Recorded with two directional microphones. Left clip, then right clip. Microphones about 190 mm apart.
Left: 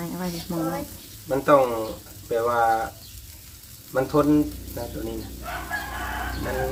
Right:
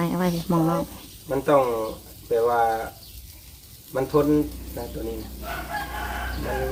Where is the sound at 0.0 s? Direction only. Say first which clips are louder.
Right 7 dB; 45° right (ahead or behind).